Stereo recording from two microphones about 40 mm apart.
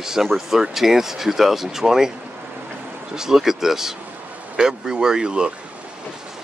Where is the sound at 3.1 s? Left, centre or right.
Centre.